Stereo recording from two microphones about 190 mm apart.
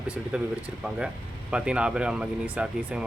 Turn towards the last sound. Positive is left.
turn(degrees=-5)  # may be behind; listen again after turning